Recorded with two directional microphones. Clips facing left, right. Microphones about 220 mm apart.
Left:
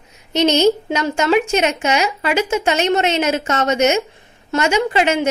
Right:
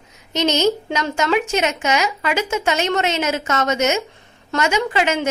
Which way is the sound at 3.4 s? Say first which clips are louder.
Left 2 dB; 30° left (ahead or behind).